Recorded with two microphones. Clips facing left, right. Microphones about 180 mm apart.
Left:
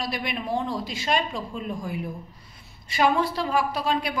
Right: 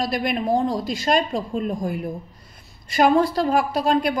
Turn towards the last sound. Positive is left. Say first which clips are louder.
# right 6 dB
turn(degrees=-45)  # may be behind; listen again after turning